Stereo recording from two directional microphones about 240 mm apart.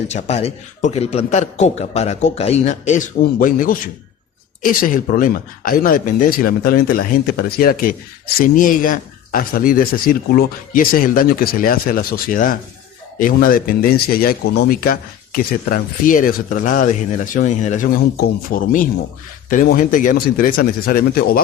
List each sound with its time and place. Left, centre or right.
0.1 s a man's voice: left